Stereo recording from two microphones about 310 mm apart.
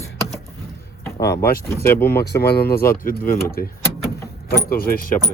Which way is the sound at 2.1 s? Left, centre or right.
Left.